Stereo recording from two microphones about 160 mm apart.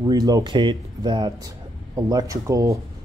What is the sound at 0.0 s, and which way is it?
Speech, 25° right (ahead or behind).